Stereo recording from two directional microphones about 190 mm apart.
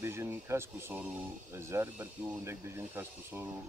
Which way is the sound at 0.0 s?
15° right (ahead or behind).